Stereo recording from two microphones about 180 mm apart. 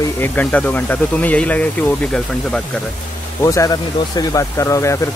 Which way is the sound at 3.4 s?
20° left (ahead or behind).